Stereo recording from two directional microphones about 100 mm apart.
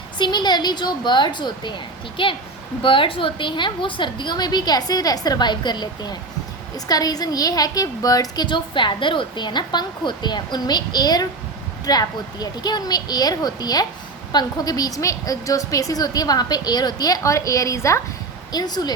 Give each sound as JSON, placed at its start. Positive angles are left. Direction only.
{"t": 0.2, "sound": "a woman's voice", "side_deg": 45}
{"t": 8.4, "sound": "a woman's voice", "side_deg": 55}
{"t": 18.5, "sound": "a woman's voice", "side_deg": 45}